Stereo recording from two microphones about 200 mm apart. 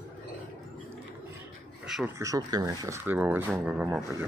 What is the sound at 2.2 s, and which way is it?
Speech, 15° right (ahead or behind).